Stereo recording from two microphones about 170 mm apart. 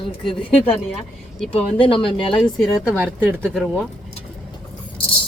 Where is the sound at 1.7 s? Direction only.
30° left (ahead or behind).